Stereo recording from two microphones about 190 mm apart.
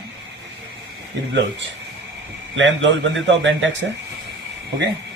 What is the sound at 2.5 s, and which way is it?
A man's voice, 80° right.